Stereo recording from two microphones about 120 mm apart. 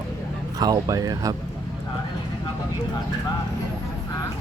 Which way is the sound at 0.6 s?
30° right (ahead or behind).